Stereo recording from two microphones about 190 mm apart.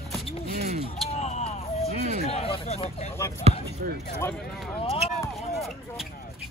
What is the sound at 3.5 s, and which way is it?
Speech, 35° right (ahead or behind).